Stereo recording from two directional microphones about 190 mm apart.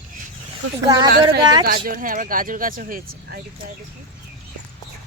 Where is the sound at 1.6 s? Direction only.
50° right (ahead or behind).